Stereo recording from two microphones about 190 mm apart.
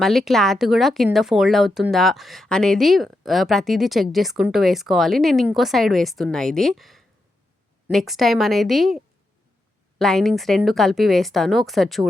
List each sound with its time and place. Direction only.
0.0 s speech: centre (ahead or behind)